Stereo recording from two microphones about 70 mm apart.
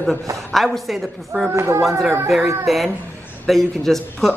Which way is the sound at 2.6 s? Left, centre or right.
Centre.